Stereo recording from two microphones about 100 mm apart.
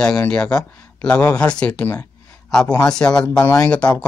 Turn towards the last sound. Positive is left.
turn(degrees=10)  # may be behind; listen again after turning